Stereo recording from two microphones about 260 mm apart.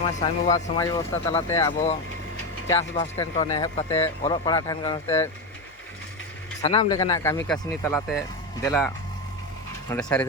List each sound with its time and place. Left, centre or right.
0.2 s speech: left
0.8 s speech: centre
6.6 s speech: centre
9.9 s speech: centre